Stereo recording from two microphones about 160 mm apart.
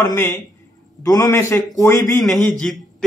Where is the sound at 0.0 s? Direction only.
20° left (ahead or behind).